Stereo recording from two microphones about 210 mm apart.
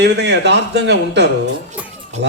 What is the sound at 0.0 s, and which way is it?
A man's voice, 55° right (ahead or behind).